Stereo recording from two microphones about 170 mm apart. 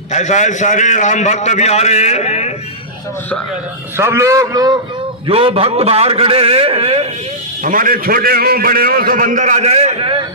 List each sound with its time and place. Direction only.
0.1 s a man's voice: 45° left (ahead or behind)
3.9 s a man's voice: 15° right (ahead or behind)
5.2 s a man's voice: 35° right (ahead or behind)
7.6 s a man's voice: 55° right (ahead or behind); by 10.2 s 30° right (ahead or behind)